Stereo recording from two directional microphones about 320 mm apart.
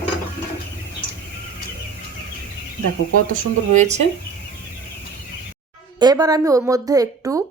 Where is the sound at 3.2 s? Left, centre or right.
Right.